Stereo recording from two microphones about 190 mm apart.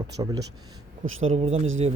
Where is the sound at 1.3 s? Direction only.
35° right (ahead or behind).